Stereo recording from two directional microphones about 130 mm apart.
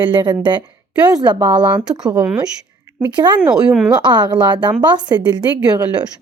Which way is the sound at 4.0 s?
35° right (ahead or behind).